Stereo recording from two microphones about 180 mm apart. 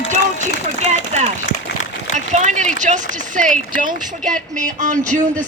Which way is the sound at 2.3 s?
40° right (ahead or behind).